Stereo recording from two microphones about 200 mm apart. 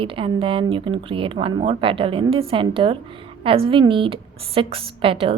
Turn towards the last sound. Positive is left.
turn(degrees=-25)  # may be behind; listen again after turning